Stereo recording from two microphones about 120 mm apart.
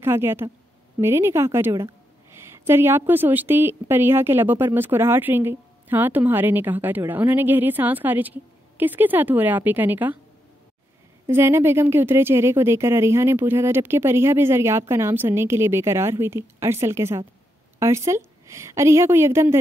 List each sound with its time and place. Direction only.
0.0 s a woman's voice: 20° right (ahead or behind)
11.2 s speech: 20° right (ahead or behind)